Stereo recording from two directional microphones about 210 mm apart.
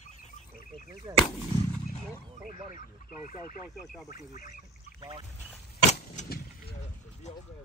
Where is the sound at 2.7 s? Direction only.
40° left (ahead or behind).